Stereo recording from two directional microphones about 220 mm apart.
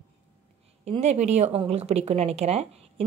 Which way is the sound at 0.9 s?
30° right (ahead or behind).